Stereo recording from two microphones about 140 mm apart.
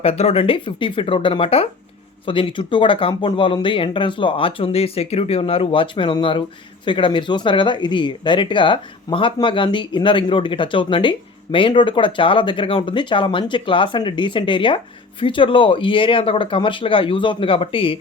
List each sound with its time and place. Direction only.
0.0 s speech: 45° left (ahead or behind)